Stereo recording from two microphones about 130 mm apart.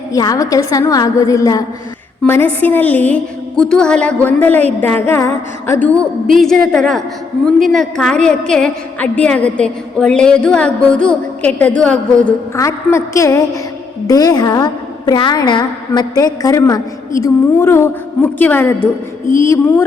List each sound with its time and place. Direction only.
0.1 s a woman's voice: 30° left (ahead or behind)
2.2 s a woman's voice: 15° left (ahead or behind)
12.5 s a woman's voice: 25° left (ahead or behind)